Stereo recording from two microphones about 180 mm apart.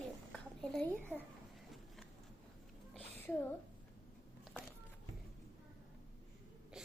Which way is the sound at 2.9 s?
10° left (ahead or behind).